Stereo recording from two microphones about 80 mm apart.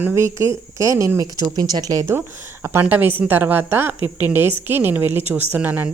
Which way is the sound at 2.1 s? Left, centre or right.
Right.